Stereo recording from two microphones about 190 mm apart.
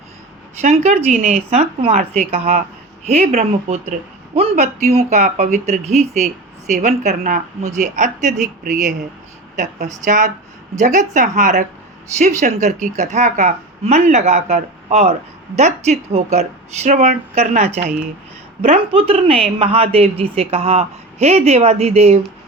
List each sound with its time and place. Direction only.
0.6 s speech: 35° right (ahead or behind)